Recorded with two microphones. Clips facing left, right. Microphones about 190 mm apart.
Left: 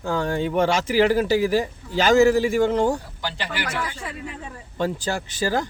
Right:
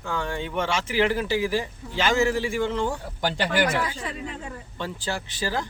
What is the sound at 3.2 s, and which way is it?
Speech, 50° right (ahead or behind).